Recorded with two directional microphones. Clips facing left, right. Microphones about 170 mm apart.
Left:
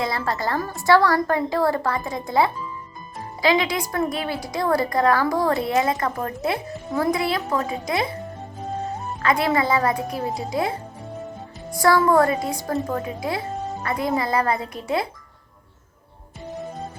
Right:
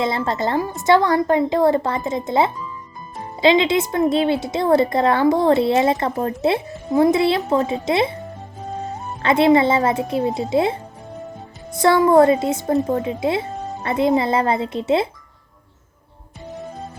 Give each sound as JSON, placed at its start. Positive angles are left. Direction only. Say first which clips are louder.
{"t": 0.0, "sound": "a woman's voice", "louder": "right 4 dB", "side_deg": -25}
{"t": 9.2, "sound": "a woman's voice", "louder": "right 7 dB", "side_deg": -25}